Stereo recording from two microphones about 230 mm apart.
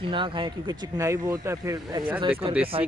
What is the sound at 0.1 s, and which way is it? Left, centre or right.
A man's voice, right.